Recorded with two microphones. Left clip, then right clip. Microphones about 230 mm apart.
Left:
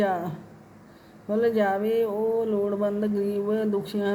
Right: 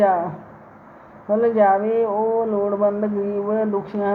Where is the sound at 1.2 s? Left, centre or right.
Left.